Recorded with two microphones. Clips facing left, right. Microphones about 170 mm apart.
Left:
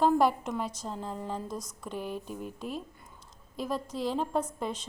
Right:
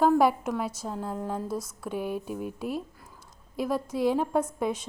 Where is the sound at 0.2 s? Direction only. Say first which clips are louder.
Right 3 dB; 5° right (ahead or behind).